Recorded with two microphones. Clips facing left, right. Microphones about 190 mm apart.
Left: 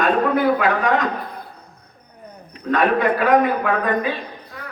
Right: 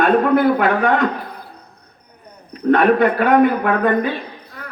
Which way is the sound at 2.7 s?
60° right (ahead or behind).